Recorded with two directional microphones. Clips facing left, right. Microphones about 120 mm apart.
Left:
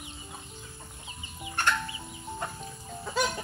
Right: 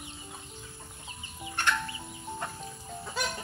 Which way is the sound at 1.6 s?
45° left (ahead or behind).